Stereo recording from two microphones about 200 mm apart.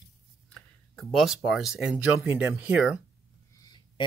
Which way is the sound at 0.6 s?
Centre (ahead or behind).